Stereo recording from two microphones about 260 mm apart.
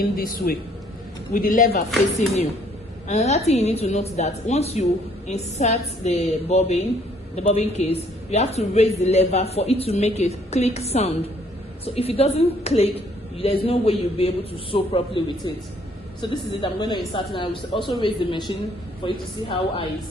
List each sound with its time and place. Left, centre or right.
0.0 s a man's voice: left
3.1 s a woman's voice: left